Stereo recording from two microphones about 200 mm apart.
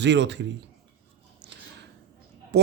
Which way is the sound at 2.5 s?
55° right (ahead or behind).